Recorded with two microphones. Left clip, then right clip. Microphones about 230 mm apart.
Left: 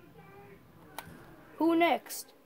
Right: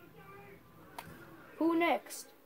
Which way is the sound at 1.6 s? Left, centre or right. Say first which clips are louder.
Left 4 dB; left.